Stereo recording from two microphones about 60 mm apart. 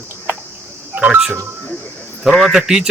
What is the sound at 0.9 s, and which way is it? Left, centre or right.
Speech, right.